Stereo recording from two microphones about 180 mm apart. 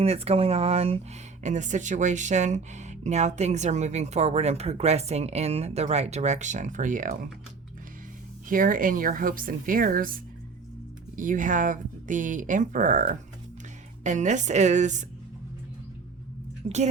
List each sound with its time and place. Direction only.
0.0 s speech: 35° right (ahead or behind)
8.4 s speech: 50° right (ahead or behind)
11.2 s speech: 45° right (ahead or behind)
16.6 s speech: 40° right (ahead or behind)